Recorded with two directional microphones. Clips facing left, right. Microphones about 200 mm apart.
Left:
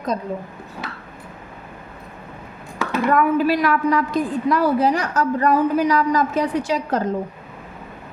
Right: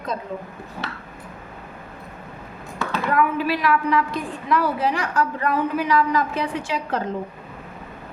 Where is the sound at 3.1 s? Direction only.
45° left (ahead or behind).